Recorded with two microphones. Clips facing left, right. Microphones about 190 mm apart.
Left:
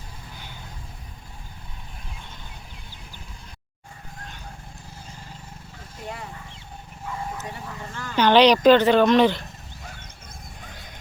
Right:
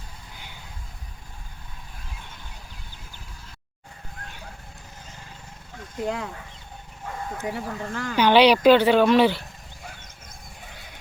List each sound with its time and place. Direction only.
6.1 s speech: 80° right
7.4 s speech: 75° right (ahead or behind)
8.1 s speech: 10° right (ahead or behind)